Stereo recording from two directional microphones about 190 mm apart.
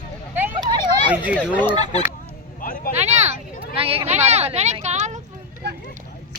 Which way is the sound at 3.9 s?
35° right (ahead or behind).